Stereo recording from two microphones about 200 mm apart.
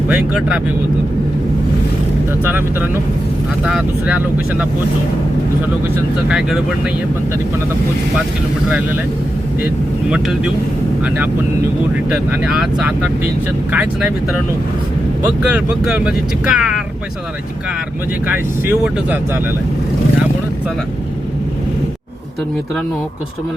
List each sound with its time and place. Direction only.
0.1 s speech: 5° right (ahead or behind)
2.4 s speech: 10° right (ahead or behind)
6.2 s speech: 5° right (ahead or behind)
10.1 s speech: 5° right (ahead or behind)
15.4 s speech: 5° right (ahead or behind)
18.3 s speech: 10° right (ahead or behind)